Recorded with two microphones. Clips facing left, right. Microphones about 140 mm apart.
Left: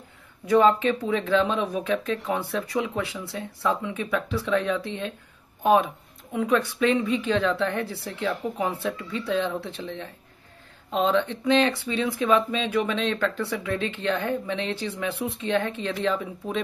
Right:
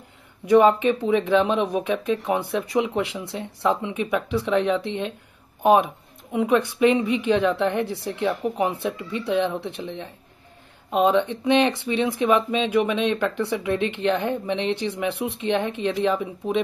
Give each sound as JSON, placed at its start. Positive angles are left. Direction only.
{"t": 0.5, "sound": "speech", "side_deg": -20}